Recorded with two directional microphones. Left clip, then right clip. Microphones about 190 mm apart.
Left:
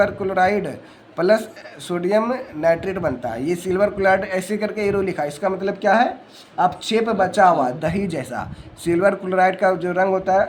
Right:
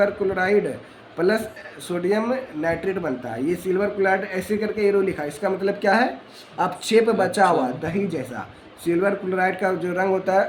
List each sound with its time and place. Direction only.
0.0 s a man's voice: 30° left (ahead or behind)
7.8 s speech: 30° left (ahead or behind)